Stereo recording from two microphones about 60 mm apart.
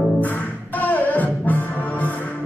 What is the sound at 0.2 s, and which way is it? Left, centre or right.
Music, left.